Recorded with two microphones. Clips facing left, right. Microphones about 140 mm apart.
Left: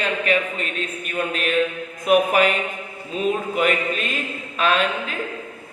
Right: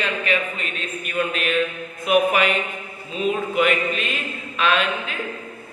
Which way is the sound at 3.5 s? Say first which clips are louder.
Right 1 dB; 40° left (ahead or behind).